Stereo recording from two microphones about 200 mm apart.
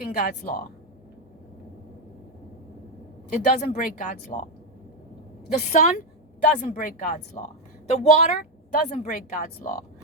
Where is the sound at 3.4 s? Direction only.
40° left (ahead or behind).